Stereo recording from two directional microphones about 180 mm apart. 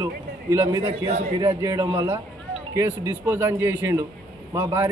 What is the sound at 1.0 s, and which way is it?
Speech, 40° right (ahead or behind).